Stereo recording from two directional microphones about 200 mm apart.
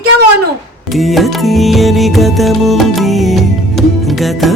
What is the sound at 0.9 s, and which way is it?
Music, centre (ahead or behind).